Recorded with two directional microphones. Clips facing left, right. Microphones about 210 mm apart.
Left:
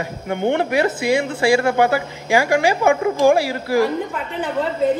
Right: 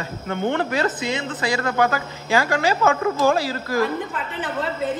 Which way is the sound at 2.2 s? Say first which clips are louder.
Left 4 dB; 15° left (ahead or behind).